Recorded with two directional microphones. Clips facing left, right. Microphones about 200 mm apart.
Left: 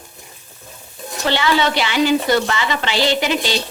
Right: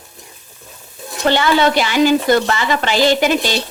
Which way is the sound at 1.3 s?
50° right (ahead or behind).